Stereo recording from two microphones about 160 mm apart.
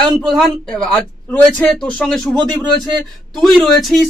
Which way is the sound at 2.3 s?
25° right (ahead or behind).